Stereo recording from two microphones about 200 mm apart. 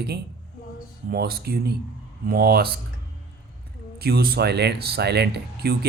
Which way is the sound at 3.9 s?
50° right (ahead or behind).